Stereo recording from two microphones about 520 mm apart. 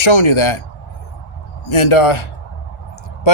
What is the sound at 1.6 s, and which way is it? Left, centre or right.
Speech, left.